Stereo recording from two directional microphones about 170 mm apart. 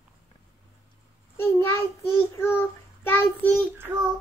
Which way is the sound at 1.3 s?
15° left (ahead or behind).